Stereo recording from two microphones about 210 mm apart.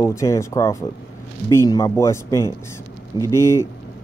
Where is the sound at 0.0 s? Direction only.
15° left (ahead or behind).